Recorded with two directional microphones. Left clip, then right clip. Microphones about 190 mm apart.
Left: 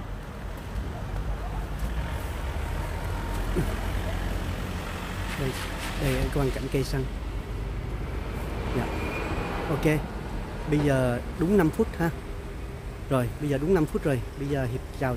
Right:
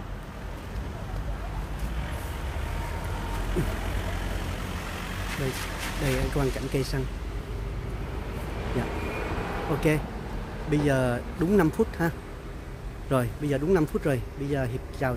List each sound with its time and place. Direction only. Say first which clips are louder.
3.6 s speech: even; 5° right (ahead or behind)
5.3 s a sound: even; 40° right (ahead or behind)
6.3 s speech: even; 10° right (ahead or behind)
9.8 s speech: even; 10° right (ahead or behind)
13.1 s speech: even; 10° right (ahead or behind)